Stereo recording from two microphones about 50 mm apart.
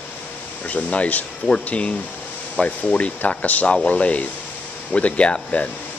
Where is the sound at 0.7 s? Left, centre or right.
Left.